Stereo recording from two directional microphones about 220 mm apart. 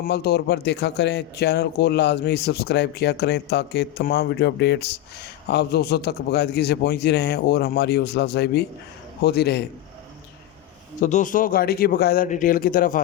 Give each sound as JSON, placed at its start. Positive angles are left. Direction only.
{"t": 0.0, "sound": "a man's voice", "side_deg": 45}
{"t": 11.0, "sound": "speech", "side_deg": 35}